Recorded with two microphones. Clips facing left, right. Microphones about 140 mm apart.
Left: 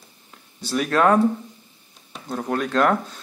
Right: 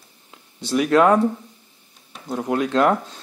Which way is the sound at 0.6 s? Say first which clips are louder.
Right 3 dB; 20° right (ahead or behind).